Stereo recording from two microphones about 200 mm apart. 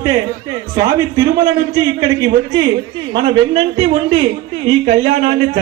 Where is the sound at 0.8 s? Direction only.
20° right (ahead or behind).